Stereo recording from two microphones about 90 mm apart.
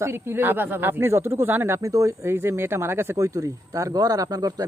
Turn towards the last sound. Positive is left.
turn(degrees=-45)  # may be behind; listen again after turning